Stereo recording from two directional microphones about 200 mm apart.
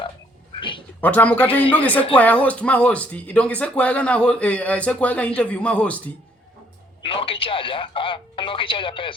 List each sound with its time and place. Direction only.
0.6 s a sound: 25° left (ahead or behind)
1.0 s speech: 10° left (ahead or behind)
7.0 s speech: 25° left (ahead or behind)